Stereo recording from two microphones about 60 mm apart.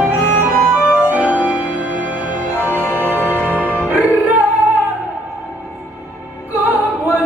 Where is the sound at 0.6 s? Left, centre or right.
Centre.